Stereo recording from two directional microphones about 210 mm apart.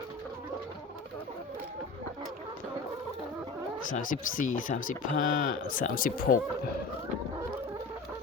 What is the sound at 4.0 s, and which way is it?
Speech, 40° left (ahead or behind).